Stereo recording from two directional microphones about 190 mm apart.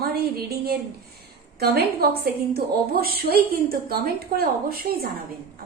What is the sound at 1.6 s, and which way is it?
A woman's voice, 55° right (ahead or behind).